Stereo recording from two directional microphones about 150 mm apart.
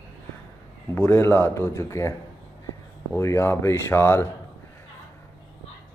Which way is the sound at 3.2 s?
20° left (ahead or behind).